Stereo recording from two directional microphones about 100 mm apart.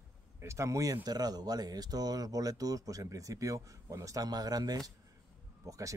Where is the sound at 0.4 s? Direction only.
30° right (ahead or behind).